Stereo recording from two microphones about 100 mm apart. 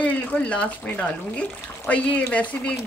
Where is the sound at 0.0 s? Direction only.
15° left (ahead or behind).